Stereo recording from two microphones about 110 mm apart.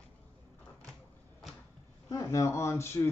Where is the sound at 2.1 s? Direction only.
30° left (ahead or behind).